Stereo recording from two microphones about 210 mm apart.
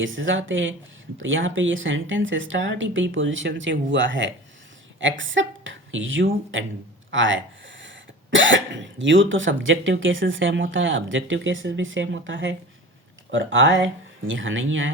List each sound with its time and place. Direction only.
0.0 s speech: 65° right (ahead or behind)